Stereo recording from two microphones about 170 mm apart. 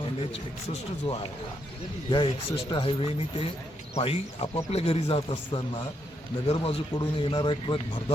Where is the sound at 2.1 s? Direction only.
25° left (ahead or behind).